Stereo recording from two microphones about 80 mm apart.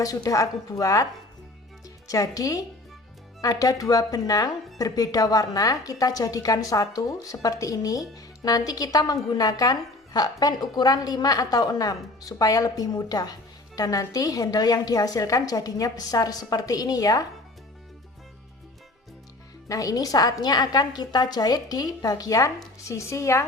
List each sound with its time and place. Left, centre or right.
0.0 s a woman's voice: left
2.0 s a woman's voice: left
19.6 s a woman's voice: left